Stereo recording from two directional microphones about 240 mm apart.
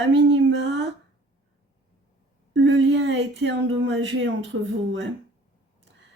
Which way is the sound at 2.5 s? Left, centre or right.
Right.